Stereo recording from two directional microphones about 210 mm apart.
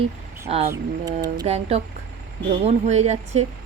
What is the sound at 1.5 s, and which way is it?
Speech, 30° right (ahead or behind).